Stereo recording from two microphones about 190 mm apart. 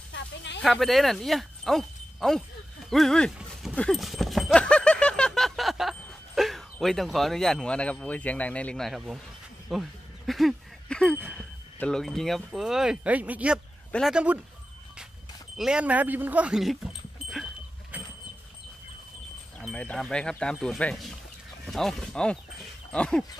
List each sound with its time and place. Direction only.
0.1 s speech: 70° left (ahead or behind)
0.6 s speech: centre (ahead or behind)
9.7 s a sound: centre (ahead or behind)
11.3 s speech: 5° left (ahead or behind)
15.5 s speech: 5° right (ahead or behind)
17.9 s vehicle: 10° right (ahead or behind)
19.6 s speech: 5° left (ahead or behind)